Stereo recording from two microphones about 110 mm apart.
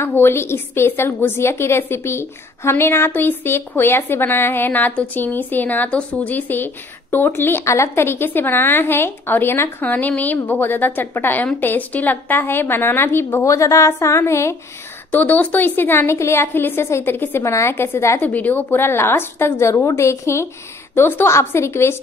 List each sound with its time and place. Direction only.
0.0 s a woman's voice: 20° left (ahead or behind)
15.0 s a woman's voice: 15° left (ahead or behind)